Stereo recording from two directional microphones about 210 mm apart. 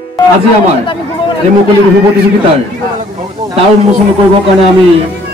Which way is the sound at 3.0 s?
30° right (ahead or behind).